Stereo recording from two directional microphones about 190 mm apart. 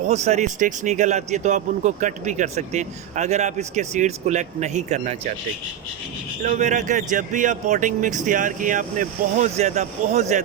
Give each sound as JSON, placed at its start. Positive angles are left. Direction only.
{"t": 0.1, "sound": "speech", "side_deg": -35}
{"t": 6.4, "sound": "speech", "side_deg": -40}